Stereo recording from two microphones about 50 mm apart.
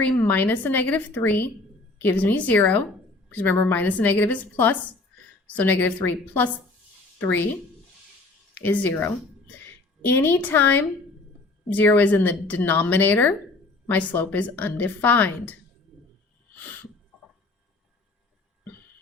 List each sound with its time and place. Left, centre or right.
0.2 s a woman's voice: left
8.5 s a woman's voice: left
16.6 s a sound: left